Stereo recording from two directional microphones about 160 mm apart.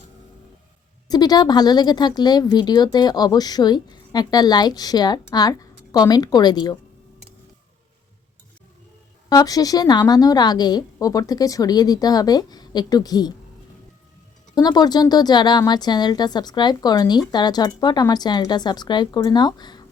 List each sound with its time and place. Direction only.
1.0 s speech: 25° left (ahead or behind)
9.3 s speech: 25° left (ahead or behind)
14.5 s speech: 25° left (ahead or behind)